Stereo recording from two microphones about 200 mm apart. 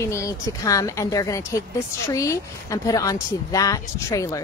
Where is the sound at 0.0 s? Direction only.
15° left (ahead or behind).